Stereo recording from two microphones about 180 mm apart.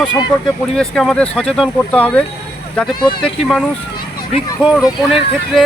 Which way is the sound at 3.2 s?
Centre (ahead or behind).